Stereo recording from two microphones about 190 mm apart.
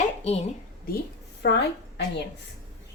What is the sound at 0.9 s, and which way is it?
Speech, 50° left (ahead or behind).